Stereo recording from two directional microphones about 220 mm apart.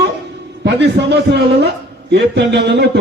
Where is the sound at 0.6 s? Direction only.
50° right (ahead or behind).